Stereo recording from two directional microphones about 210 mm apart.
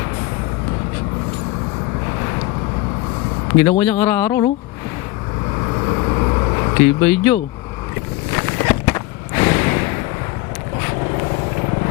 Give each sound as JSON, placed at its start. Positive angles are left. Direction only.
{"t": 3.6, "sound": "speech", "side_deg": 10}
{"t": 5.7, "sound": "vehicle", "side_deg": 20}
{"t": 8.3, "sound": "a sound", "side_deg": 15}